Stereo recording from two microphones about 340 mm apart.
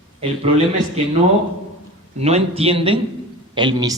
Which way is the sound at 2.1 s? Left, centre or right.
Centre.